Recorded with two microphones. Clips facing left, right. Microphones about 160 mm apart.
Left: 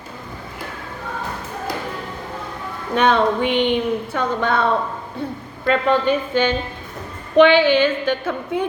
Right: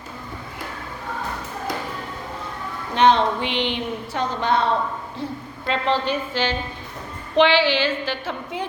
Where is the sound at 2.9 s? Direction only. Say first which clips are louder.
Left 1 dB; 50° left (ahead or behind).